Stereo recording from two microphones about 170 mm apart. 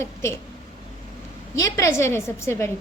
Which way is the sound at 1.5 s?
20° left (ahead or behind).